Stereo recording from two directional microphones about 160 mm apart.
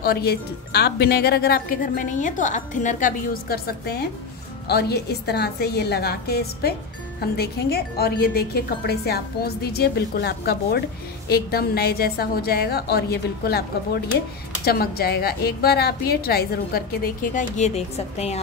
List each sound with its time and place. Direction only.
0.0 s a woman's voice: 80° left
4.6 s a woman's voice: 85° left; by 18.4 s 40° left (ahead or behind)